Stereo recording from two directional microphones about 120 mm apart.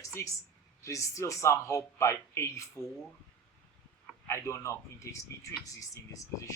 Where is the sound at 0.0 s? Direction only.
25° left (ahead or behind).